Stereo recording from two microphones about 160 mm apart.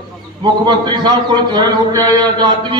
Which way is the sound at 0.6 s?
25° right (ahead or behind).